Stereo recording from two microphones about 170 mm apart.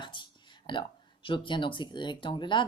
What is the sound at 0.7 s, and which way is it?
Speech, 30° left (ahead or behind).